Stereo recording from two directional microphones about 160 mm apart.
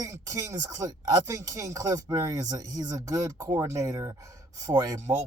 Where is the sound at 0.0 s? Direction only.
20° right (ahead or behind).